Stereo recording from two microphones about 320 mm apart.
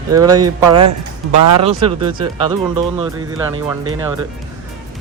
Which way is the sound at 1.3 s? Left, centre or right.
Right.